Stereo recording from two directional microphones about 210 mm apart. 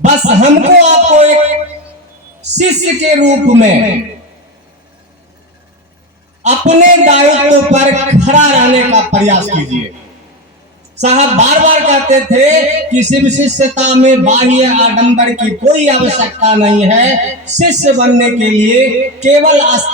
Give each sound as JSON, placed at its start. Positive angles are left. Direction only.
{"t": 0.0, "sound": "a man's voice", "side_deg": -35}
{"t": 2.6, "sound": "a man's voice", "side_deg": -35}
{"t": 6.4, "sound": "a man's voice", "side_deg": -35}
{"t": 11.0, "sound": "a man's voice", "side_deg": -35}